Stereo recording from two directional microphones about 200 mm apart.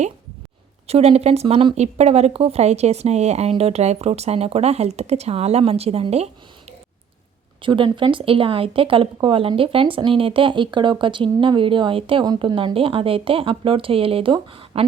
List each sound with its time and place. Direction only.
0.9 s speech: 30° right (ahead or behind)
7.6 s speech: 25° right (ahead or behind)